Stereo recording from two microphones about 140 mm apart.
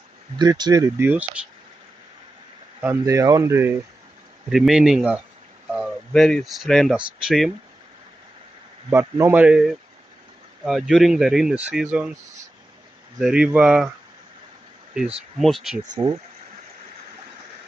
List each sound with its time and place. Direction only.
0.4 s speech: 30° right (ahead or behind)
0.9 s speech: 15° right (ahead or behind)
2.8 s speech: 20° right (ahead or behind)
4.5 s speech: 5° right (ahead or behind)
9.2 s speech: 15° right (ahead or behind)
13.2 s speech: 10° right (ahead or behind)
15.3 s speech: centre (ahead or behind)
15.8 s speech: 30° right (ahead or behind)